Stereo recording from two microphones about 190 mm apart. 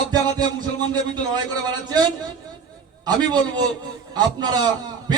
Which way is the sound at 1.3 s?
20° right (ahead or behind).